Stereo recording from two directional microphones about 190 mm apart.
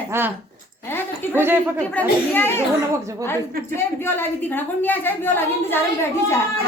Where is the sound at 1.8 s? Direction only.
10° left (ahead or behind).